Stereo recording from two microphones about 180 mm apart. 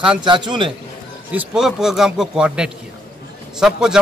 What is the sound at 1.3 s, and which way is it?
Speech, 5° right (ahead or behind).